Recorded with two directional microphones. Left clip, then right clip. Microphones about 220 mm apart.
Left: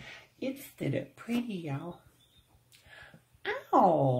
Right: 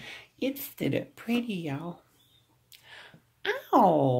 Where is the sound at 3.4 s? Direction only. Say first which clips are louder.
Right 2 dB; 40° right (ahead or behind).